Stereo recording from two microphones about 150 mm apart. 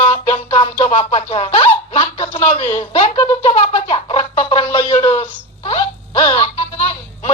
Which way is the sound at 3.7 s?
40° left (ahead or behind).